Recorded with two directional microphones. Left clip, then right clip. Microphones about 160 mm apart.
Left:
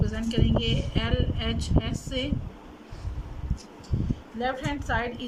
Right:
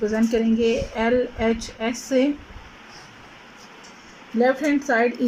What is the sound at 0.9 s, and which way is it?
A woman's voice, 50° right (ahead or behind).